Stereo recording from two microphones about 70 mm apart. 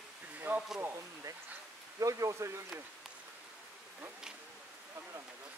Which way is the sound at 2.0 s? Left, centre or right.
Right.